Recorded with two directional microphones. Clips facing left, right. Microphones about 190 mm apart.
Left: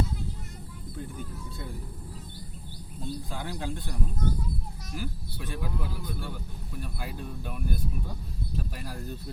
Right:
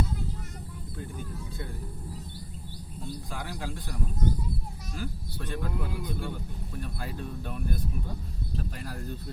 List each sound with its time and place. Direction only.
3.4 s speech: 20° left (ahead or behind)
4.9 s speech: 5° left (ahead or behind)
6.0 s a man's voice: 15° right (ahead or behind)
6.3 s speech: 5° left (ahead or behind)